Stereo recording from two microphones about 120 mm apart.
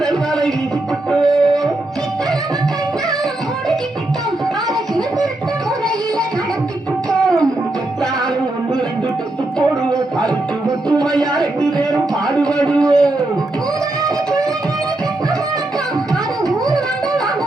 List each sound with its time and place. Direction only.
0.0 s music: 5° left (ahead or behind)
10.7 s music: 35° right (ahead or behind)
11.0 s music: 5° left (ahead or behind)
11.8 s a sound: 5° left (ahead or behind)